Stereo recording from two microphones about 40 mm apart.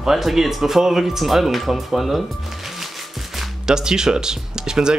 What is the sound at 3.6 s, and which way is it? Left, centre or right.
Speech, centre.